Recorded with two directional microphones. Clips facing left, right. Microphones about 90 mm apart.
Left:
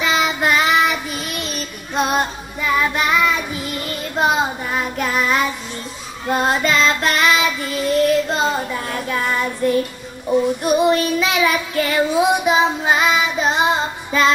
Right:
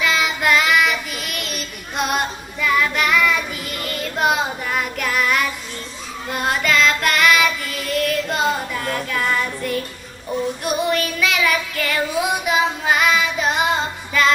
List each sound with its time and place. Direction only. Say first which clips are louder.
0.0 s child singing: left 2 dB; 25° left (ahead or behind)